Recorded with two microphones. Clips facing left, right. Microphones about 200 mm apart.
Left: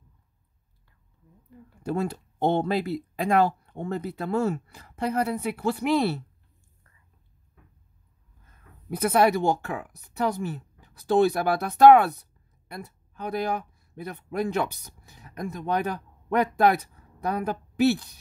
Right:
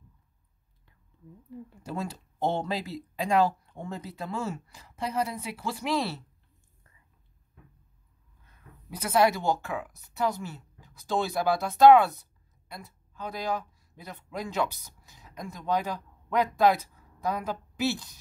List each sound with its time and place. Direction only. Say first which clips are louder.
1.8 s speech: left 8 dB; 60° left (ahead or behind)
8.5 s speech: left 10 dB; 55° left (ahead or behind)